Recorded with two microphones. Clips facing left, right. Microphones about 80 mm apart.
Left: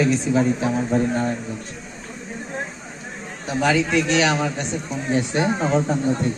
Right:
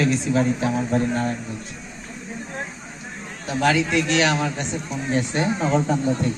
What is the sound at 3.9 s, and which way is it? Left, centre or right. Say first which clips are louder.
Speech: left 1 dB; centre.